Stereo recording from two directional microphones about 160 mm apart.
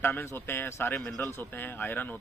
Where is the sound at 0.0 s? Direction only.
15° left (ahead or behind).